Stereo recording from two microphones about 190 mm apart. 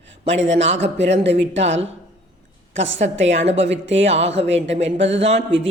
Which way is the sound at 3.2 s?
35° right (ahead or behind).